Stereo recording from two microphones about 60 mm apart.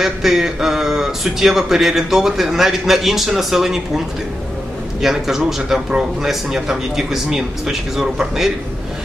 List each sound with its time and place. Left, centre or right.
0.0 s speech: centre
5.0 s speech: centre